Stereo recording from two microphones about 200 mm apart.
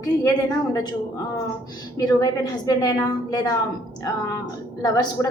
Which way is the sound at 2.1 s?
20° left (ahead or behind).